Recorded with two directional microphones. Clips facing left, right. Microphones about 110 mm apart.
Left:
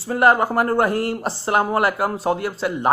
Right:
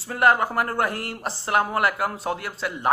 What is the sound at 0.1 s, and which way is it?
Speech, 30° left (ahead or behind).